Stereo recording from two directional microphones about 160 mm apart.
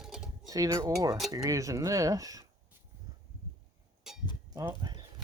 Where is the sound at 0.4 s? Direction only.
20° right (ahead or behind).